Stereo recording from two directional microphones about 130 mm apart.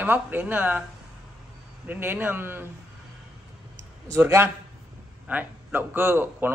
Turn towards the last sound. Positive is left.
turn(degrees=-15)  # may be behind; listen again after turning